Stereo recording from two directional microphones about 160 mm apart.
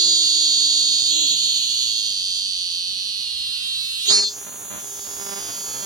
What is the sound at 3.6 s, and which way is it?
Insect, 25° right (ahead or behind).